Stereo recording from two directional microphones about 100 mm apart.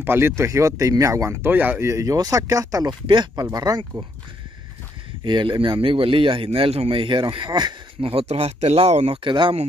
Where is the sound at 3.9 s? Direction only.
55° right (ahead or behind).